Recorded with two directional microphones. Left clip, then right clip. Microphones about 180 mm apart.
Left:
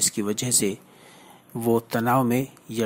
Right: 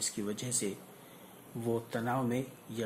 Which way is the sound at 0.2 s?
35° left (ahead or behind).